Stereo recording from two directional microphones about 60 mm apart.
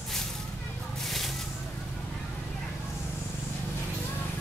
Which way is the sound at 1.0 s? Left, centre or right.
Centre.